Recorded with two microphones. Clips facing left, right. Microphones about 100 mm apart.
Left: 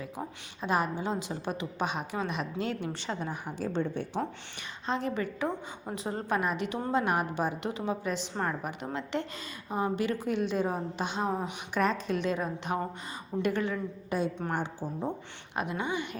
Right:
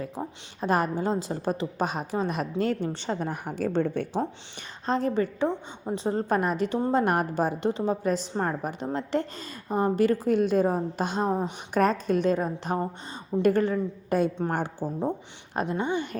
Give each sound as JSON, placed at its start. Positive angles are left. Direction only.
{"t": 0.6, "sound": "a woman's voice", "side_deg": -45}
{"t": 2.9, "sound": "a woman's voice", "side_deg": -35}
{"t": 3.2, "sound": "a woman's voice", "side_deg": -50}
{"t": 4.9, "sound": "a woman's voice", "side_deg": -35}
{"t": 7.0, "sound": "a woman's voice", "side_deg": -50}
{"t": 15.5, "sound": "a woman's voice", "side_deg": -35}